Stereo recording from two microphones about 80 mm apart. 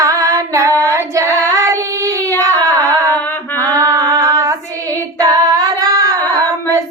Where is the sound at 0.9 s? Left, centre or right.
Right.